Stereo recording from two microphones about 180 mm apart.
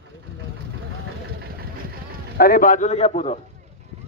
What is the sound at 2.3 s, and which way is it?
A man's voice, 55° left (ahead or behind).